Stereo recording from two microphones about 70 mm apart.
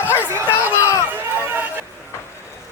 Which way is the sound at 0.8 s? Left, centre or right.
Left.